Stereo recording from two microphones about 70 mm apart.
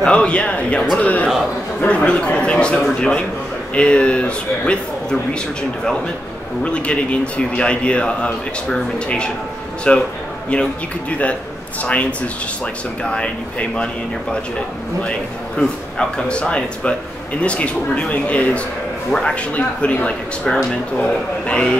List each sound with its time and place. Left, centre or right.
0.0 s speech: centre
0.9 s a sound: centre
1.8 s speech: centre
6.6 s speech: centre
15.0 s speech: centre